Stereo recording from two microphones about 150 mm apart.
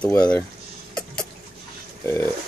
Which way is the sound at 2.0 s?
15° left (ahead or behind).